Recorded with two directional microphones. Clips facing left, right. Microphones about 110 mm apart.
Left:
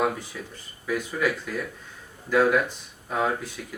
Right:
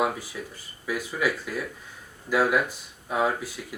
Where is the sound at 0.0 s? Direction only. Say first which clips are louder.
Left 1 dB; 5° right (ahead or behind).